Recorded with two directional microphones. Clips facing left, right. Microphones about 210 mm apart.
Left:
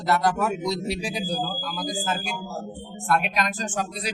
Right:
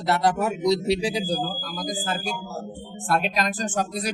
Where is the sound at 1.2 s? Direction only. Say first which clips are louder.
Right 1 dB; 40° right (ahead or behind).